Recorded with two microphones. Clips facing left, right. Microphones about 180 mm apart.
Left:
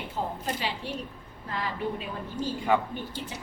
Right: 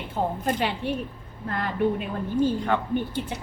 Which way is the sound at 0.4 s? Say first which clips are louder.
Right 7 dB; 55° right (ahead or behind).